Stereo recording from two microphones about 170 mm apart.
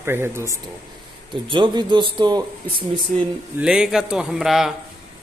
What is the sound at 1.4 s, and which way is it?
A man's voice, 30° right (ahead or behind).